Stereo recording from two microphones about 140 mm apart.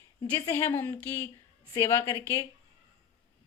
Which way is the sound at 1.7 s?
20° left (ahead or behind).